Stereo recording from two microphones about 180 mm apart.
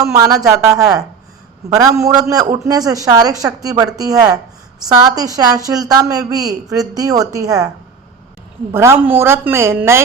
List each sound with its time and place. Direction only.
0.0 s a woman's voice: 15° right (ahead or behind)
8.7 s a woman's voice: 15° right (ahead or behind)